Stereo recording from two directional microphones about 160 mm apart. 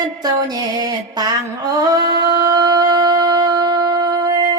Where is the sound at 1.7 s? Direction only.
25° right (ahead or behind).